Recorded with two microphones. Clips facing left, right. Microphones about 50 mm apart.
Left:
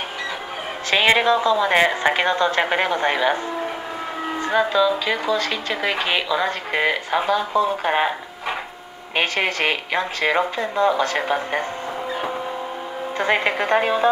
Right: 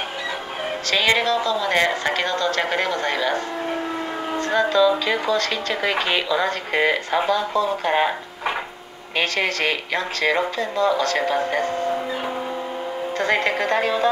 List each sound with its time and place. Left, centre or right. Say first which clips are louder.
0.8 s speech: left 3 dB; left
4.4 s speech: right 1 dB; centre
9.1 s speech: left 1 dB; centre
13.2 s speech: left 1 dB; centre